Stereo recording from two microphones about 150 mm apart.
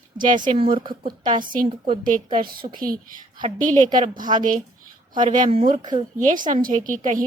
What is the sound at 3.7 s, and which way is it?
Speech, 55° right (ahead or behind).